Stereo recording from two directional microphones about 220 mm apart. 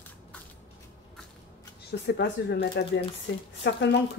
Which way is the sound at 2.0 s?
50° left (ahead or behind).